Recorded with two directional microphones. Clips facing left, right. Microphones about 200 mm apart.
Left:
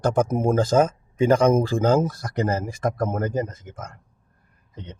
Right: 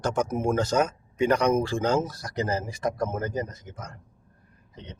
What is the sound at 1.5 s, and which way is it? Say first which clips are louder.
A man's voice: left 4 dB; 50° left (ahead or behind).